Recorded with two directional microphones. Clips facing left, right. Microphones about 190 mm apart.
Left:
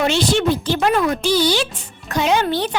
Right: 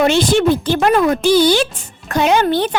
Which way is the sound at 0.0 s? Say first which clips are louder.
Right 4 dB; 50° right (ahead or behind).